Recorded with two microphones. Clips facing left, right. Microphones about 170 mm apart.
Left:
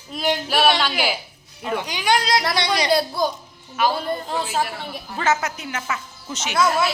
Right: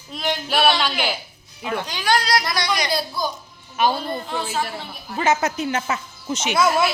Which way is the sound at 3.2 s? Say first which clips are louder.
Left 4 dB; 65° left (ahead or behind).